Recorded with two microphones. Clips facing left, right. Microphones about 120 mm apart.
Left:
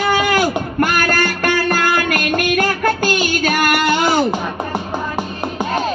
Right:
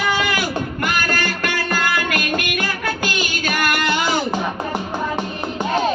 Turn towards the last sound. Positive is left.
turn(degrees=45)  # may be behind; listen again after turning